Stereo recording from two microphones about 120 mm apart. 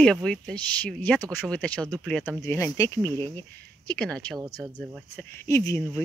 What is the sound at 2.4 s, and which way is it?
Speech, 25° left (ahead or behind).